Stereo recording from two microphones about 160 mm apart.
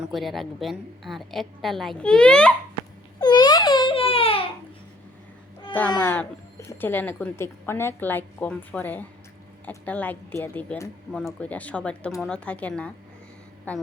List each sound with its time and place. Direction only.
0.0 s a woman's voice: centre (ahead or behind)
3.2 s a sound: 25° left (ahead or behind)
5.7 s speech: 10° left (ahead or behind)